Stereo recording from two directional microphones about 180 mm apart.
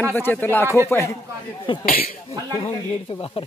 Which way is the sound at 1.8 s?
50° left (ahead or behind).